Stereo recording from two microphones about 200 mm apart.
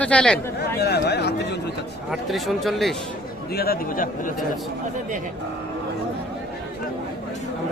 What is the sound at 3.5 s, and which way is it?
Speech, 50° left (ahead or behind).